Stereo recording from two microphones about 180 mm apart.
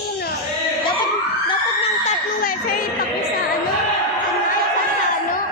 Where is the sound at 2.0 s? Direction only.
50° left (ahead or behind).